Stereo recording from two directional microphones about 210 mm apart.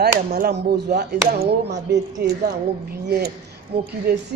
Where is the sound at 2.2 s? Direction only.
50° right (ahead or behind).